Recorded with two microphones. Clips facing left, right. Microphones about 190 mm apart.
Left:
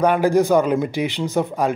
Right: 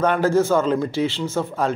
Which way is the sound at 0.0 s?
10° left (ahead or behind).